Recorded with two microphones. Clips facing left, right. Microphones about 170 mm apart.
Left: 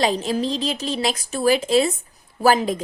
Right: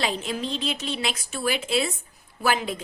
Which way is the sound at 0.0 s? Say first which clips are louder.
Left 7 dB; 35° left (ahead or behind).